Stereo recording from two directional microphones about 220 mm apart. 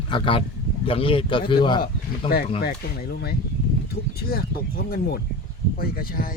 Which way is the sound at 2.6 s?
45° left (ahead or behind).